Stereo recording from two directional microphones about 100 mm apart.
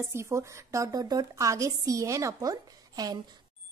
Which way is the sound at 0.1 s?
30° right (ahead or behind).